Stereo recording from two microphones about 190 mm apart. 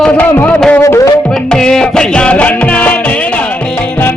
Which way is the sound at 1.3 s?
5° left (ahead or behind).